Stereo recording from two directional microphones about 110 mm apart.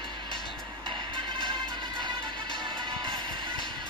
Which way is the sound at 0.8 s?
45° right (ahead or behind).